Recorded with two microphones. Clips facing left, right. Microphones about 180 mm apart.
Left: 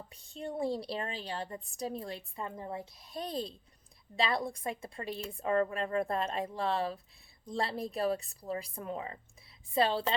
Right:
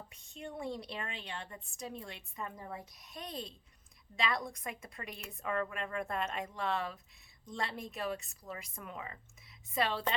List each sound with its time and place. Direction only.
0.1 s a woman's voice: 35° left (ahead or behind)